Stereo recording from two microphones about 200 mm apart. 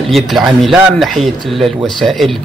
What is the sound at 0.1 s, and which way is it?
Speech, centre (ahead or behind).